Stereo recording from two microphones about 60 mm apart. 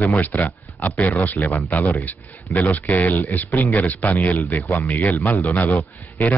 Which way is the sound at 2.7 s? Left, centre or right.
Left.